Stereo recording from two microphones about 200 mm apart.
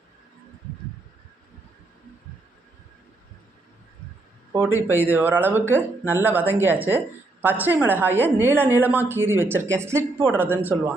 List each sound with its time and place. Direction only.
4.5 s a woman's voice: 10° right (ahead or behind)